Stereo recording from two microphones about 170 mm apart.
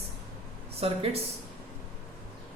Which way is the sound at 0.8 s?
35° right (ahead or behind).